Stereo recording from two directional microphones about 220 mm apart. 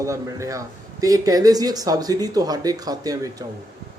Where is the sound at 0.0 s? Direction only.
15° right (ahead or behind).